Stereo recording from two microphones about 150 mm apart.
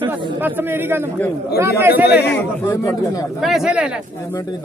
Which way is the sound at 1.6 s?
15° right (ahead or behind).